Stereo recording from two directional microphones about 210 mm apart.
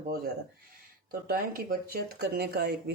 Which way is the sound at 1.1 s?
45° right (ahead or behind).